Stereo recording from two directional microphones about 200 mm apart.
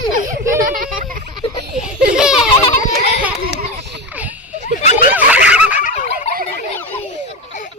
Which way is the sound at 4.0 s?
10° right (ahead or behind).